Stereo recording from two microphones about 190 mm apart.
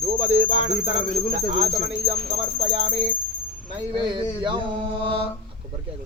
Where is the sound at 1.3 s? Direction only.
35° right (ahead or behind).